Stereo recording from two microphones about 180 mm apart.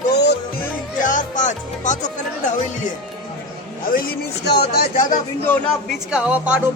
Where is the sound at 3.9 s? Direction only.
60° left (ahead or behind).